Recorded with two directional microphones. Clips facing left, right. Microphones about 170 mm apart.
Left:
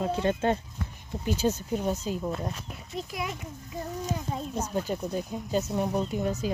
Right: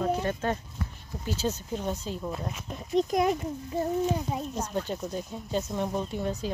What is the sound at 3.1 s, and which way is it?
Speech, 40° right (ahead or behind).